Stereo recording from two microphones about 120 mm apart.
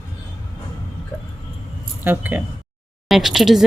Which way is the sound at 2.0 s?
15° right (ahead or behind).